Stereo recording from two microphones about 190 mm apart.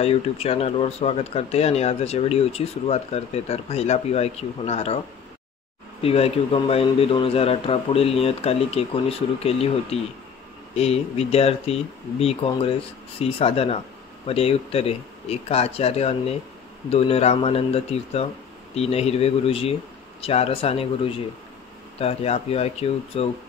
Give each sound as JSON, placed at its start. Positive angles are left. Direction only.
{"t": 0.0, "sound": "speech", "side_deg": 30}